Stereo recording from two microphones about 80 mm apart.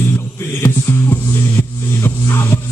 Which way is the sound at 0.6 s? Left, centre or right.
Left.